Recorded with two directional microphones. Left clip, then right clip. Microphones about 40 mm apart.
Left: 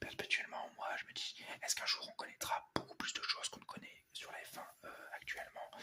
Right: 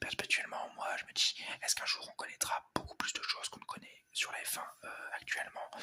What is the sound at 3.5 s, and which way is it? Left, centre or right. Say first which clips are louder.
Whispering: right 5 dB; right.